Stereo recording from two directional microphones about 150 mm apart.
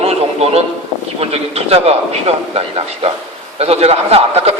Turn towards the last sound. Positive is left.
turn(degrees=-40)  # may be behind; listen again after turning